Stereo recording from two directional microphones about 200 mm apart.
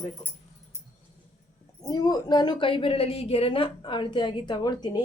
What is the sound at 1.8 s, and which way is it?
A woman's voice, 20° left (ahead or behind).